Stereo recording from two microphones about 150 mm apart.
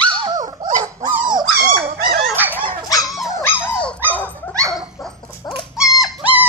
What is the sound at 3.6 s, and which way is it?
Dog, 5° left (ahead or behind).